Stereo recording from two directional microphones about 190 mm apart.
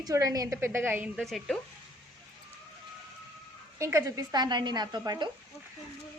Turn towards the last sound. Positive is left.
turn(degrees=-20)  # may be behind; listen again after turning